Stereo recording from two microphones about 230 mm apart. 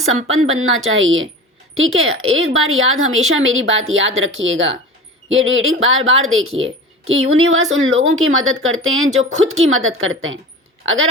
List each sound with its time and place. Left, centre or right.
0.3 s speech: right